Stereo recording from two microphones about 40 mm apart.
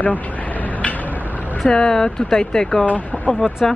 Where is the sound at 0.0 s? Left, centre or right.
Left.